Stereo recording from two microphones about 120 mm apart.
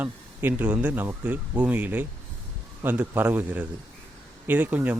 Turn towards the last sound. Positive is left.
turn(degrees=-15)  # may be behind; listen again after turning